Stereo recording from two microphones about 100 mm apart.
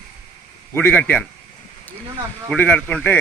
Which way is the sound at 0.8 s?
20° left (ahead or behind).